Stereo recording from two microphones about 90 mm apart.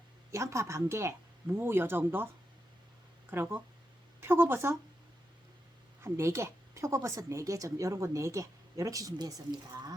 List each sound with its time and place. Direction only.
0.3 s speech: 35° right (ahead or behind)
6.0 s a woman's voice: 30° right (ahead or behind)